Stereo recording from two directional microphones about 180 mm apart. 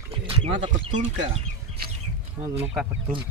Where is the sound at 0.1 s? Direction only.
30° right (ahead or behind).